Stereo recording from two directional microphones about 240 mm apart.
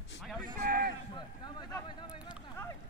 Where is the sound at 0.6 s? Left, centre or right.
Right.